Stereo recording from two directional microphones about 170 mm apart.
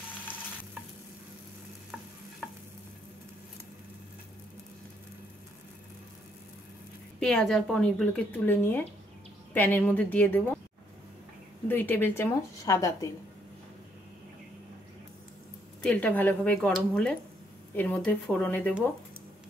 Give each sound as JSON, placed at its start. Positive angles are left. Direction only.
{"t": 7.2, "sound": "a woman's voice", "side_deg": 5}
{"t": 11.6, "sound": "a woman's voice", "side_deg": 10}
{"t": 15.8, "sound": "a woman's voice", "side_deg": 5}